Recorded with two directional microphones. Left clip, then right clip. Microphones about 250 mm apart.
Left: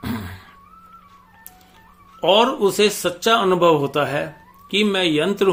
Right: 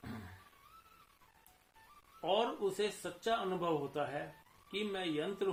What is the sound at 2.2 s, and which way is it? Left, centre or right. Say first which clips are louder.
Speech: left 19 dB; left.